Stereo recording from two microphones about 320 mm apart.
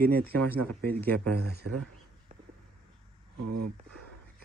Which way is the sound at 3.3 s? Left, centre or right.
Right.